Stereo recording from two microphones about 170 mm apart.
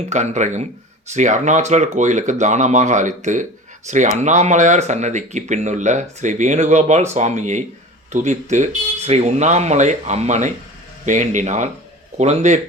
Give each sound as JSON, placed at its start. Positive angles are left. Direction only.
{"t": 0.1, "sound": "speech", "side_deg": -45}